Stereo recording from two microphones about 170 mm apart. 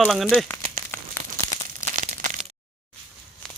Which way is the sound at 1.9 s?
50° right (ahead or behind).